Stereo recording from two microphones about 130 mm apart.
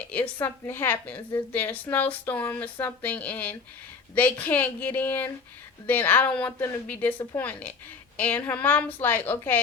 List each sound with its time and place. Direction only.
0.1 s a woman's voice: 15° left (ahead or behind)